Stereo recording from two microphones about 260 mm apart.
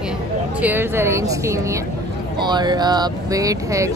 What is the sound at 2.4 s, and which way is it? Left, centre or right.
A woman's voice, centre.